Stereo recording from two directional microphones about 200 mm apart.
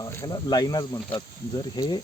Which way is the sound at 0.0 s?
20° left (ahead or behind).